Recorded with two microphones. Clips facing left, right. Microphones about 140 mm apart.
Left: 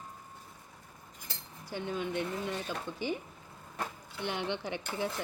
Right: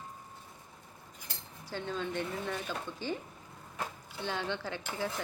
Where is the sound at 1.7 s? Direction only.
15° left (ahead or behind).